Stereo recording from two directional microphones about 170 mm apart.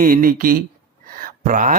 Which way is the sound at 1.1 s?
55° right (ahead or behind).